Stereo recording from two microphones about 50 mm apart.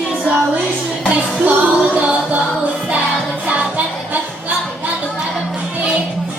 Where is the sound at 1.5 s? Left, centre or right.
Right.